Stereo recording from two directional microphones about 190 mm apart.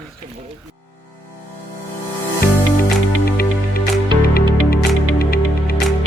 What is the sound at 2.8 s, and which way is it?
Music, 55° left (ahead or behind).